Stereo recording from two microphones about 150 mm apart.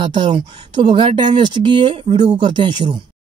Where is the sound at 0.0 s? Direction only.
30° right (ahead or behind).